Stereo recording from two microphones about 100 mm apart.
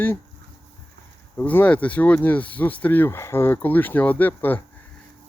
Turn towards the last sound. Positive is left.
turn(degrees=20)  # may be behind; listen again after turning